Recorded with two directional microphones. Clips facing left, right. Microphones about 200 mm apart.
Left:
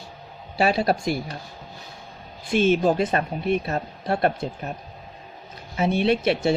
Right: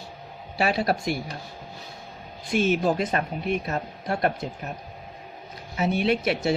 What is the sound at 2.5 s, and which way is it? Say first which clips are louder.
Speech: left 3 dB; 25° left (ahead or behind).